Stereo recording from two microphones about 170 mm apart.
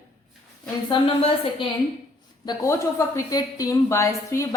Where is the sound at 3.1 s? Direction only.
20° left (ahead or behind).